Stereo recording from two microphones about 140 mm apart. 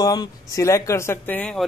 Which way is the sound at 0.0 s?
30° left (ahead or behind).